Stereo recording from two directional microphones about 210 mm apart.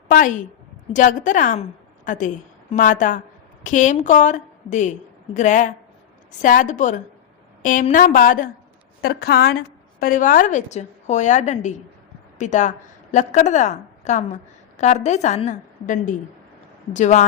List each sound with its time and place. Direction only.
0.1 s a woman's voice: 40° left (ahead or behind)